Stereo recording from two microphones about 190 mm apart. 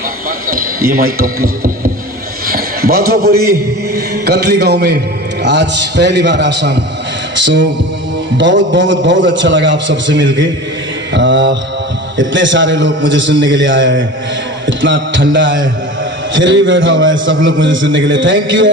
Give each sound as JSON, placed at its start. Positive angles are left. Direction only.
{"t": 0.3, "sound": "a man's voice", "side_deg": -50}